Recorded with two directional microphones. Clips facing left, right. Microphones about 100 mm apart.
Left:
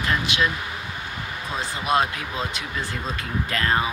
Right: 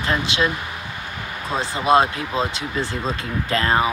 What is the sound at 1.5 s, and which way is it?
Speech, 30° right (ahead or behind).